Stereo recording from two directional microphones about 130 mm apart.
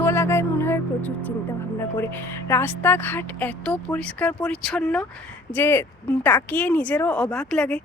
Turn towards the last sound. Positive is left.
turn(degrees=5)  # may be behind; listen again after turning